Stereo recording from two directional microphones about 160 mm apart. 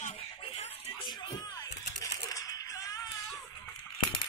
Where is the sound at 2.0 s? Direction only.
20° left (ahead or behind).